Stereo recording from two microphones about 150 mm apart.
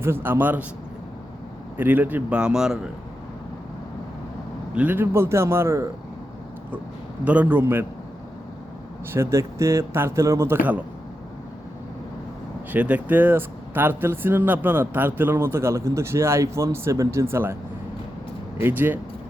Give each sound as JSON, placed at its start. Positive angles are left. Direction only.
{"t": 0.0, "sound": "speech", "side_deg": -15}
{"t": 1.8, "sound": "speech", "side_deg": -10}
{"t": 4.7, "sound": "speech", "side_deg": -10}
{"t": 7.3, "sound": "speech", "side_deg": -10}
{"t": 9.1, "sound": "speech", "side_deg": -20}
{"t": 12.7, "sound": "speech", "side_deg": -10}
{"t": 18.6, "sound": "speech", "side_deg": -10}